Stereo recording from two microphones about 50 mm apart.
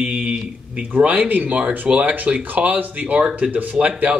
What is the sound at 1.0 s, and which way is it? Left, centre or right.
Speech, right.